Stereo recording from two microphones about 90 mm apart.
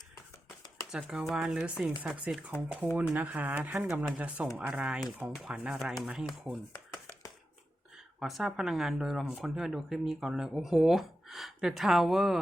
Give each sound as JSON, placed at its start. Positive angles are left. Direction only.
{"t": 1.0, "sound": "speech", "side_deg": -5}
{"t": 7.9, "sound": "speech", "side_deg": 0}